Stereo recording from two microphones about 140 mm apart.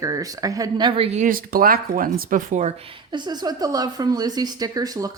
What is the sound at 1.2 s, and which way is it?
Speech, 85° right.